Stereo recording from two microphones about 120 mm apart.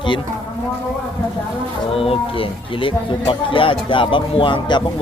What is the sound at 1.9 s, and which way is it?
Speech, 55° left (ahead or behind).